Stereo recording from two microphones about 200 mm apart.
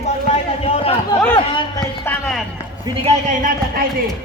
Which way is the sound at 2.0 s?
10° left (ahead or behind).